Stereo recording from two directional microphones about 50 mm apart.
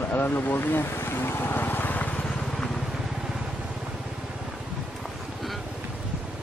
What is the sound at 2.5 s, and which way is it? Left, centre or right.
Vehicle, centre.